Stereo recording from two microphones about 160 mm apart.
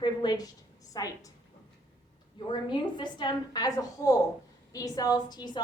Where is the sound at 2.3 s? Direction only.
30° left (ahead or behind).